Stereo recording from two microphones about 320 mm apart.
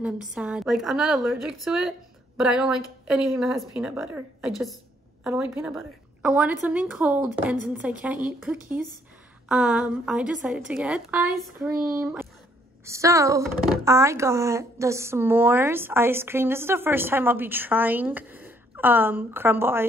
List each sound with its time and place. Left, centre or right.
0.0 s a woman's voice: centre